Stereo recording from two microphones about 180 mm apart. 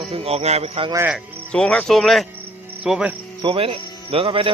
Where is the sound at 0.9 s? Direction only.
15° right (ahead or behind).